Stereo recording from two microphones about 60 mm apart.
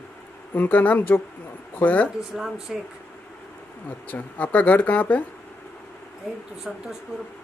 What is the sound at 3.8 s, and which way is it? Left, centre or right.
Speech, left.